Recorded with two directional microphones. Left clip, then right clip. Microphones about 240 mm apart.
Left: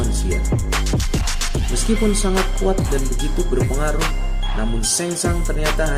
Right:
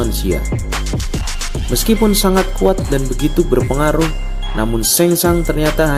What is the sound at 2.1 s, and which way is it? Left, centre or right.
Speech, right.